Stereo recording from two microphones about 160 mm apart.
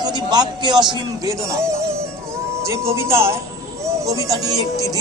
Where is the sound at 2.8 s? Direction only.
15° right (ahead or behind).